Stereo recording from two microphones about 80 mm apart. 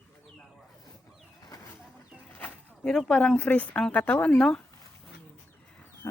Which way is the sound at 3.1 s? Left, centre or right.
Centre.